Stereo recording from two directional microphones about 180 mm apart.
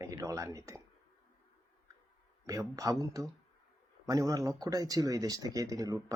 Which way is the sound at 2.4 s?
15° right (ahead or behind).